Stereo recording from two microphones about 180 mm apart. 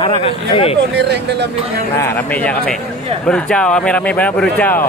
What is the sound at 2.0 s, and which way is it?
Speech, 10° left (ahead or behind).